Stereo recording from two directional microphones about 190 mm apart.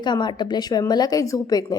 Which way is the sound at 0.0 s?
25° left (ahead or behind).